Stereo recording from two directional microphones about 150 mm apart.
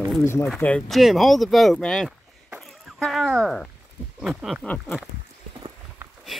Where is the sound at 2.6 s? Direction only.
Centre (ahead or behind).